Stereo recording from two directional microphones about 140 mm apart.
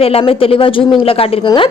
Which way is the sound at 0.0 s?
40° left (ahead or behind).